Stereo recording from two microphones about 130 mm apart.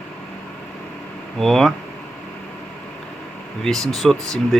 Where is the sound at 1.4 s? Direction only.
Centre (ahead or behind).